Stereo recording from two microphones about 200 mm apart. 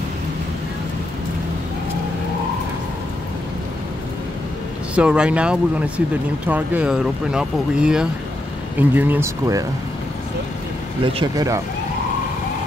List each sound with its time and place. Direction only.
4.9 s speech: 5° right (ahead or behind)
11.1 s speech: 15° right (ahead or behind)